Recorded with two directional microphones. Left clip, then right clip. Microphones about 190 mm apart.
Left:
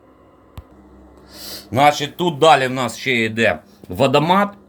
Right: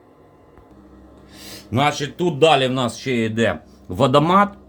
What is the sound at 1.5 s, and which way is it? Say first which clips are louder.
A man's voice: left 6 dB; 5° left (ahead or behind).